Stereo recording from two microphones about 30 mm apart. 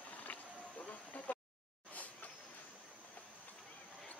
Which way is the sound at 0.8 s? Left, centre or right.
Left.